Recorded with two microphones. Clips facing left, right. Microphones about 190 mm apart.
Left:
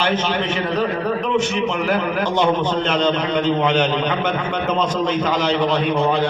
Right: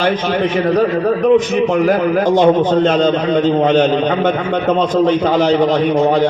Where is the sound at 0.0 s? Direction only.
40° right (ahead or behind).